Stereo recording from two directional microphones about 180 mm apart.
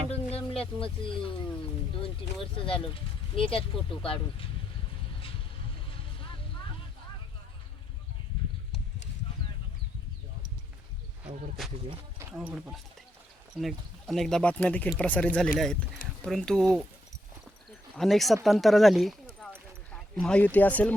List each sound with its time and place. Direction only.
0.1 s a sound: 35° left (ahead or behind)
0.8 s speech: 30° left (ahead or behind)
2.4 s speech: 30° left (ahead or behind)
12.3 s speech: 5° right (ahead or behind)
17.9 s speech: centre (ahead or behind)